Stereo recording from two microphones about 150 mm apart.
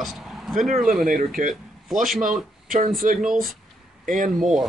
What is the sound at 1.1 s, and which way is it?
Speech, 65° right (ahead or behind).